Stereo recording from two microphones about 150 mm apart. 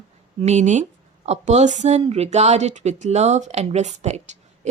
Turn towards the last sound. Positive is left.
turn(degrees=-50)  # may be behind; listen again after turning